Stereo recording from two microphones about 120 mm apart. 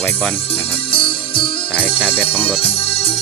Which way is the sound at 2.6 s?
55° left (ahead or behind).